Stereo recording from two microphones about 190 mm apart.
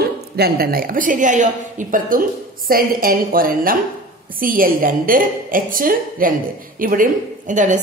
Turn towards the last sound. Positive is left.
turn(degrees=-40)  # may be behind; listen again after turning